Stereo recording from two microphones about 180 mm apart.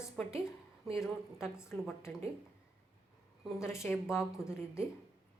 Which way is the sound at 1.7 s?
5° left (ahead or behind).